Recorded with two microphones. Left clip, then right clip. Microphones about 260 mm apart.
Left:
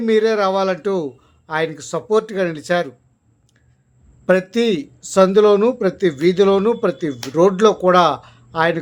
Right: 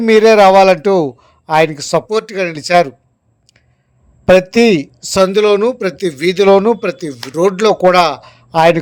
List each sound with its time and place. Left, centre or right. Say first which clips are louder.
0.0 s speech: right 9 dB; right
4.3 s speech: right 8 dB; right